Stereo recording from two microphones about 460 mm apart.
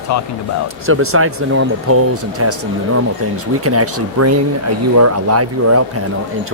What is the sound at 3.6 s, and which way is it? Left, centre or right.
Speech, right.